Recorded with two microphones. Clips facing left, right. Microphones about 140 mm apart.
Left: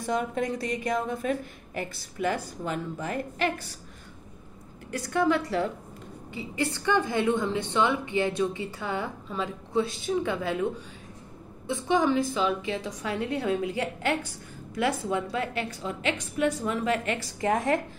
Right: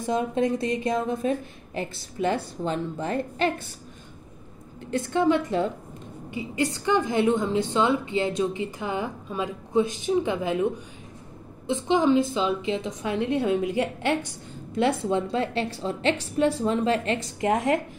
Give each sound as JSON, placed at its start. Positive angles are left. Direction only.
{"t": 0.0, "sound": "a woman's voice", "side_deg": -20}
{"t": 4.9, "sound": "a woman's voice", "side_deg": -20}